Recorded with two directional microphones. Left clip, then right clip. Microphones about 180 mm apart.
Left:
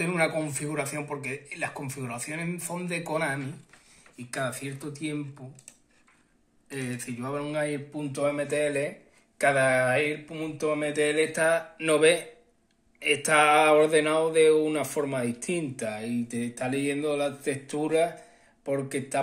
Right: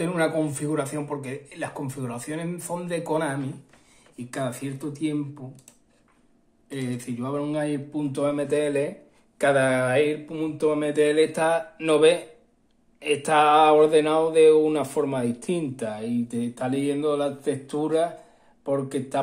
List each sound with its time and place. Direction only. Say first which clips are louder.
0.0 s speech: right 3 dB; 5° left (ahead or behind)
6.7 s speech: right 3 dB; 10° left (ahead or behind)